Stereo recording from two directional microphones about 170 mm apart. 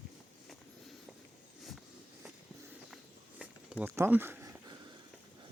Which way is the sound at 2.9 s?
5° right (ahead or behind).